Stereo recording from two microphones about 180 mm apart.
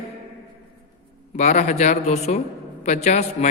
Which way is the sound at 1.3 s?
40° left (ahead or behind).